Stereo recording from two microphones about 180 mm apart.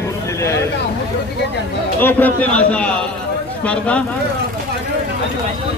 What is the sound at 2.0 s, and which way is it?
A man's voice, 10° left (ahead or behind).